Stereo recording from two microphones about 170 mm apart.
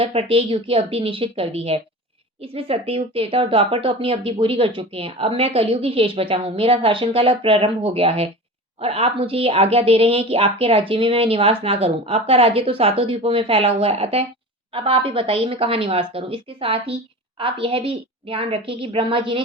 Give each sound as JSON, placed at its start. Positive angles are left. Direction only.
{"t": 0.0, "sound": "speech", "side_deg": -35}